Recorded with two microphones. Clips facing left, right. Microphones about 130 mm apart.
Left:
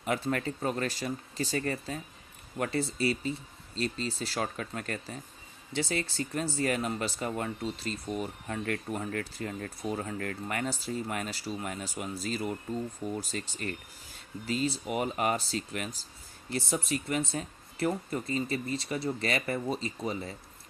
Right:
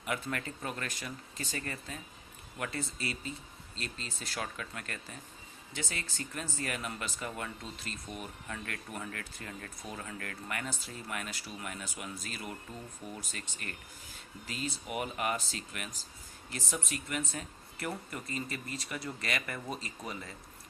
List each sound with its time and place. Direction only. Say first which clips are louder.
0.0 s speech: left 6 dB; 40° left (ahead or behind)